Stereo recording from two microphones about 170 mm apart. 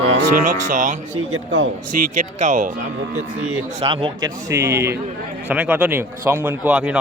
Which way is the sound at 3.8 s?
30° right (ahead or behind).